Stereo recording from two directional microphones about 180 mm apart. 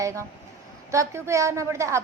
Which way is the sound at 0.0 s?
15° right (ahead or behind).